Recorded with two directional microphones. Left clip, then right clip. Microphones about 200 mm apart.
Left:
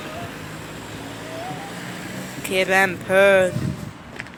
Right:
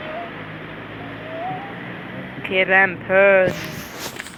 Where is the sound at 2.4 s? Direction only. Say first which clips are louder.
Right 2 dB; 15° left (ahead or behind).